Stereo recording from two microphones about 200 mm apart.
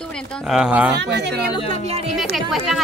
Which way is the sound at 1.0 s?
60° right (ahead or behind).